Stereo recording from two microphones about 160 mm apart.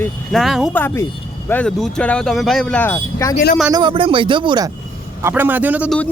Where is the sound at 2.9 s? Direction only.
20° left (ahead or behind).